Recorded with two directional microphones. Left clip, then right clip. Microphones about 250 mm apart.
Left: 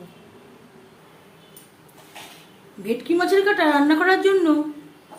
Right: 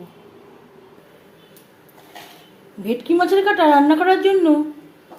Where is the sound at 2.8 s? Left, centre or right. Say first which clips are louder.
Right 3 dB; centre.